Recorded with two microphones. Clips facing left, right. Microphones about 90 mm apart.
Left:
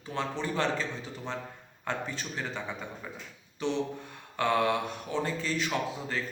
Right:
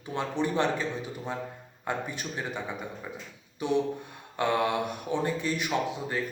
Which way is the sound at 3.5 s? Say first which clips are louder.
Right 4 dB; 10° right (ahead or behind).